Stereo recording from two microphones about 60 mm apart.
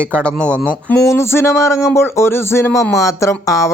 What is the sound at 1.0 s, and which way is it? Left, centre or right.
Speech, left.